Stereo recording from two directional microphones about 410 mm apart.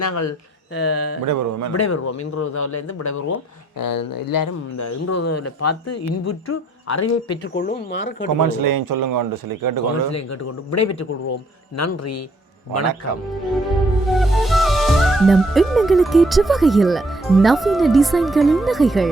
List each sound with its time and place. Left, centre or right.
0.0 s speech: left
1.2 s a man's voice: right
1.7 s speech: left
3.8 s speech: left
7.5 s speech: left
8.4 s a man's voice: right
10.7 s speech: left
14.1 s speech: centre